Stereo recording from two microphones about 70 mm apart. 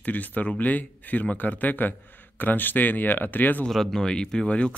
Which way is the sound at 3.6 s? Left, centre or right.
Centre.